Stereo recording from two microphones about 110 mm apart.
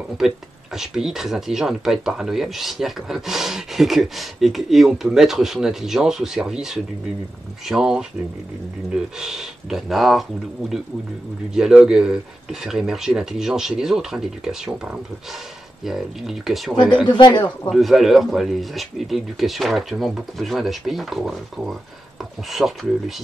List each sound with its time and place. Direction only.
0.7 s speech: 5° right (ahead or behind)
11.5 s speech: 5° right (ahead or behind)
17.0 s speech: 45° left (ahead or behind)
17.6 s speech: centre (ahead or behind)